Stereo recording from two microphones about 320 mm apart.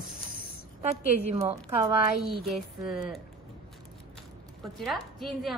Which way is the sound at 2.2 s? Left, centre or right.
Centre.